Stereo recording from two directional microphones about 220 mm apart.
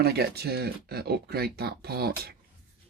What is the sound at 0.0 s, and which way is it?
Speech, 45° right (ahead or behind).